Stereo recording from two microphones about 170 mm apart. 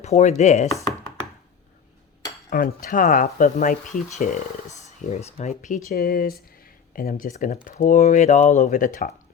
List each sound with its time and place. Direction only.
0.0 s chopping: 40° left (ahead or behind)
2.5 s speech: 60° left (ahead or behind)
5.9 s speech: 60° left (ahead or behind)